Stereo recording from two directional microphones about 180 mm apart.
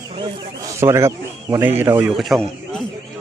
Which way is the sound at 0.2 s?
15° right (ahead or behind).